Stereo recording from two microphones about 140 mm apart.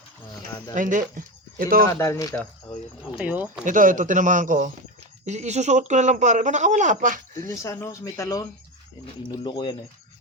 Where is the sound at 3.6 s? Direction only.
70° right (ahead or behind).